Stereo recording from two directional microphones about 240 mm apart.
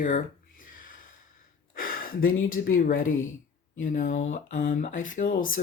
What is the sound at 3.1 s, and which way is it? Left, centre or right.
Speech, left.